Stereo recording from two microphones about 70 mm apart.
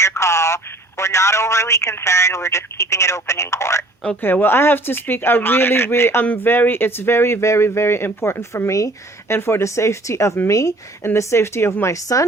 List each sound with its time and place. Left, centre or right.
0.0 s speech: left
4.2 s speech: left
6.2 s speech: left
6.5 s speech: left
11.0 s speech: left